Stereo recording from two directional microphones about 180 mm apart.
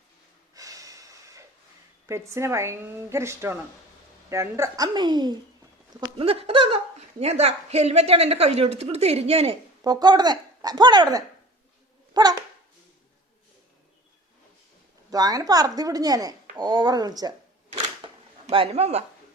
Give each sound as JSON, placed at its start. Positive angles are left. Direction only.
{"t": 0.5, "sound": "snort", "side_deg": -20}
{"t": 2.0, "sound": "speech", "side_deg": -15}
{"t": 9.8, "sound": "speech", "side_deg": -20}
{"t": 15.1, "sound": "speech", "side_deg": -20}
{"t": 17.7, "sound": "shuffling cards", "side_deg": -35}